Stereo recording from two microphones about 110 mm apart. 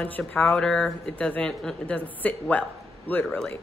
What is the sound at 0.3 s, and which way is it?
A woman's voice, 10° left (ahead or behind).